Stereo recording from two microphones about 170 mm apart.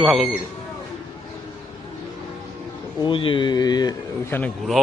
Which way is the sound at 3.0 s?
30° left (ahead or behind).